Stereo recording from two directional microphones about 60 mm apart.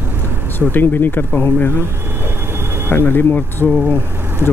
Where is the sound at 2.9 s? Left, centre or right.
Left.